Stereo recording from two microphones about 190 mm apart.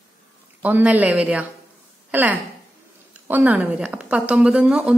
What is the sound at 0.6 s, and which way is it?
A woman's voice, 10° right (ahead or behind).